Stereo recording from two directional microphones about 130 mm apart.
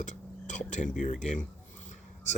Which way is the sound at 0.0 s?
70° left (ahead or behind).